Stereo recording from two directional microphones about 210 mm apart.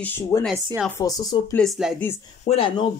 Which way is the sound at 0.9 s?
15° left (ahead or behind).